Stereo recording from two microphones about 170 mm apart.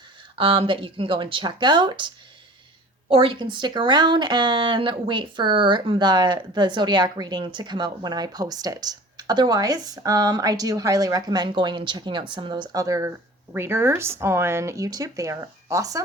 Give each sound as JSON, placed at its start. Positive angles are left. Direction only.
{"t": 0.3, "sound": "speech", "side_deg": -30}
{"t": 3.1, "sound": "speech", "side_deg": -30}